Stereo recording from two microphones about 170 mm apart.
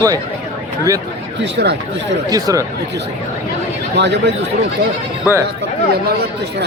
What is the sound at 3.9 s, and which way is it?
Speech, 90° right.